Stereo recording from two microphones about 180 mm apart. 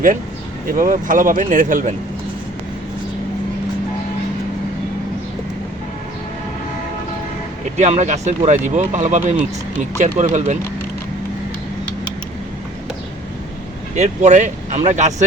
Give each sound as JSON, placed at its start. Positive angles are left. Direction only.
{"t": 0.7, "sound": "speech", "side_deg": -50}
{"t": 7.8, "sound": "speech", "side_deg": -40}
{"t": 13.9, "sound": "speech", "side_deg": -40}